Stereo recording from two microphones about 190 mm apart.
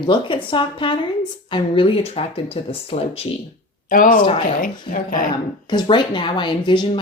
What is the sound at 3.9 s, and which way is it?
Speech, 45° left (ahead or behind).